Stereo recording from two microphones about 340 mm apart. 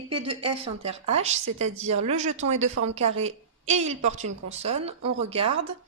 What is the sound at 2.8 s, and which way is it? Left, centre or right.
Speech, right.